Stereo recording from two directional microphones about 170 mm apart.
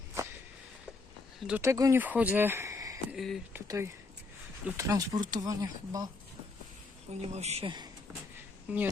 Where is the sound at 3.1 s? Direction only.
Centre (ahead or behind).